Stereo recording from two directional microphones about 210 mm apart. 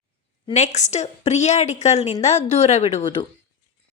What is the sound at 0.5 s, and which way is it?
A woman's voice, 35° left (ahead or behind).